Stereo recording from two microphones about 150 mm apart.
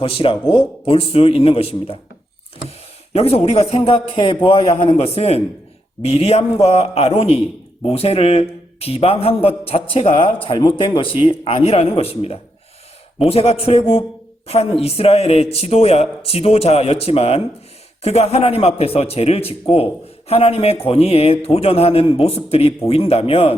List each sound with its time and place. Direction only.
0.0 s a woman's voice: 40° left (ahead or behind)